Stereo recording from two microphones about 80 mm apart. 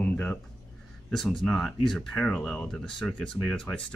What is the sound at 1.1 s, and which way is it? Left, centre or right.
Speech, centre.